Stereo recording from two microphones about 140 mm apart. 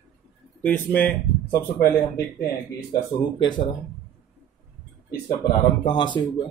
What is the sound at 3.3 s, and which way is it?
Speech, 35° left (ahead or behind).